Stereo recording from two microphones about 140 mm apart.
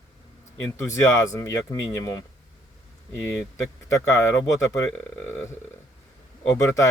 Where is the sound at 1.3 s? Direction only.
25° left (ahead or behind).